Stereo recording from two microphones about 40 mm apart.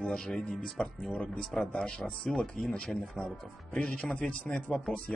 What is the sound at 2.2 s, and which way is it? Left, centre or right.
Speech, centre.